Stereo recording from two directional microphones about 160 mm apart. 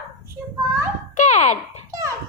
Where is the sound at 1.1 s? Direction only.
45° left (ahead or behind).